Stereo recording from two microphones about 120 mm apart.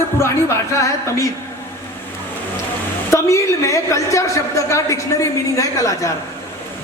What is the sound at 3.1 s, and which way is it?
A woman's voice, 25° left (ahead or behind).